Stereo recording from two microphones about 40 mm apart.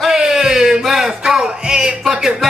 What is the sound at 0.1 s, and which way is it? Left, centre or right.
Music, centre.